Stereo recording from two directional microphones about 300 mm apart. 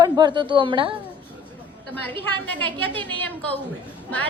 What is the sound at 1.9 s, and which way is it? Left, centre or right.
A woman's voice, centre.